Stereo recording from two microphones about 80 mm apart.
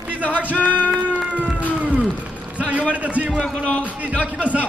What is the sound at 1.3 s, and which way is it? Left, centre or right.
Music, centre.